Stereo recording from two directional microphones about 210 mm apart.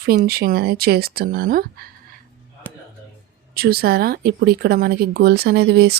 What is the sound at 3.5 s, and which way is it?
Speech, 45° right (ahead or behind).